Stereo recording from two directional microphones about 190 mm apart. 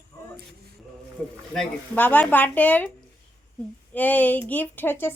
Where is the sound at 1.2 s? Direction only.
5° left (ahead or behind).